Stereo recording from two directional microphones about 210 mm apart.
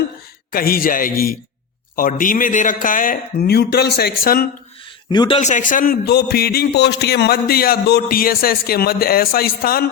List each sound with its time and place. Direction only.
0.5 s speech: 45° left (ahead or behind)
5.1 s speech: 20° left (ahead or behind)
5.4 s speech: 35° left (ahead or behind)